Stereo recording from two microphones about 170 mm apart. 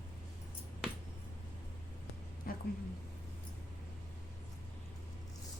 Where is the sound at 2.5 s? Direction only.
60° left (ahead or behind).